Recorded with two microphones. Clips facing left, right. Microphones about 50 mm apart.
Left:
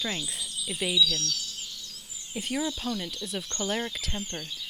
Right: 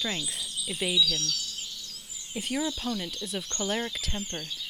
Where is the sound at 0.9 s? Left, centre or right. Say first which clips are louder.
Left 2 dB; right.